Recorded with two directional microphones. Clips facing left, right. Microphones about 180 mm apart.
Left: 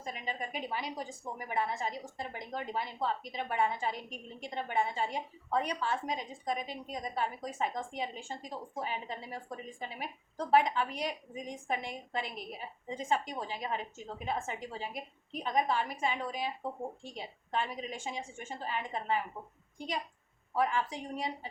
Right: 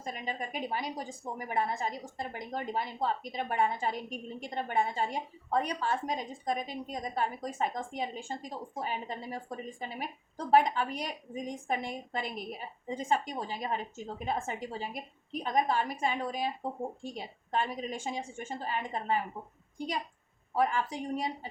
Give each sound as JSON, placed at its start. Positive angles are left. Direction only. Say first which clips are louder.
{"t": 0.0, "sound": "a woman's voice", "louder": "right 2 dB", "side_deg": -45}
{"t": 20.6, "sound": "a woman's voice", "louder": "right 2 dB", "side_deg": -40}